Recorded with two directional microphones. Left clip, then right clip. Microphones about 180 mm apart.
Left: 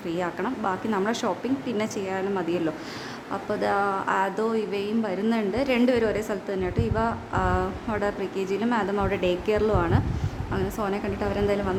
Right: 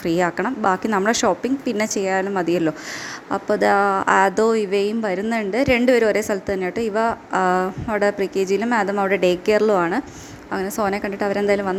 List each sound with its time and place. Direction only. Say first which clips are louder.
0.0 s a woman's voice: right 8 dB; 35° right (ahead or behind)